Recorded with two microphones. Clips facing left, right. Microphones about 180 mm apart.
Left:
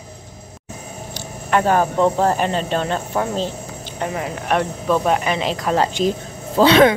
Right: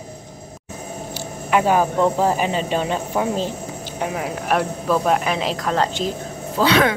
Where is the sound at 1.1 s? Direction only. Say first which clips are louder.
Even; 5° right (ahead or behind); by 6.1 s 10° left (ahead or behind).